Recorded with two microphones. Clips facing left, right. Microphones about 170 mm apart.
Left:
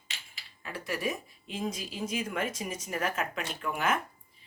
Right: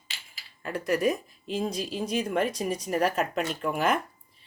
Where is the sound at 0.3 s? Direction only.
45° right (ahead or behind).